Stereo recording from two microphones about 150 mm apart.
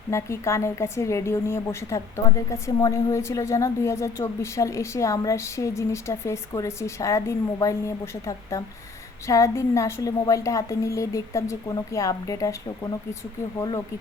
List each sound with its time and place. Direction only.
0.1 s a woman's voice: 20° left (ahead or behind)